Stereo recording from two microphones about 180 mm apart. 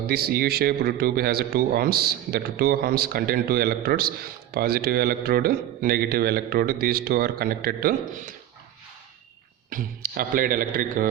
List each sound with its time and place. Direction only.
0.1 s speech: 60° right (ahead or behind)
9.6 s a man's voice: 50° right (ahead or behind)